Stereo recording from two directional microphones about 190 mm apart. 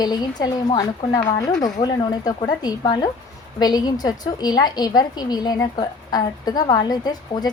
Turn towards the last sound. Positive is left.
turn(degrees=20)  # may be behind; listen again after turning